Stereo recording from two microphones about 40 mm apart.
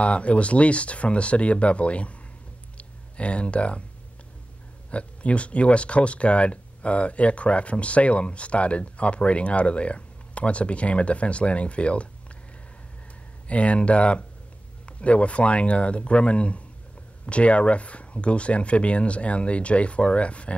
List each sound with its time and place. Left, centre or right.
0.0 s speech: left
4.9 s speech: left
13.5 s speech: left